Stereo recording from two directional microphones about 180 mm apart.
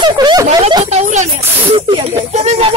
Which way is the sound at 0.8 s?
40° right (ahead or behind).